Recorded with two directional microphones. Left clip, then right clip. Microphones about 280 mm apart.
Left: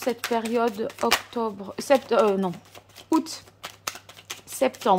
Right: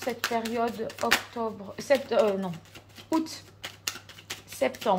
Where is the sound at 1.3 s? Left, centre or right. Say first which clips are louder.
Left 4 dB; left.